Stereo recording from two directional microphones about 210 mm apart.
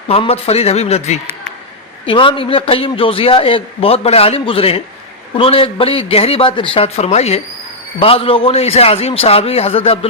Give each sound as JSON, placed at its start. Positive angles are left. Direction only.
{"t": 0.1, "sound": "a man's voice", "side_deg": 30}